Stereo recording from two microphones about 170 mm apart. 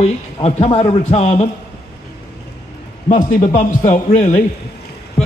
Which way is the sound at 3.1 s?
45° left (ahead or behind).